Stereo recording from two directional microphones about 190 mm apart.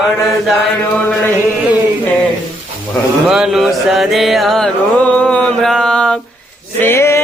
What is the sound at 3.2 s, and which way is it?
Mantra, 5° right (ahead or behind).